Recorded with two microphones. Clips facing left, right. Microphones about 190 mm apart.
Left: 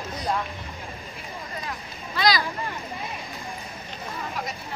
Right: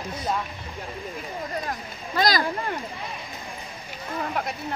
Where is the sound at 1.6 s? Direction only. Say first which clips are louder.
Right 3 dB; 45° right (ahead or behind).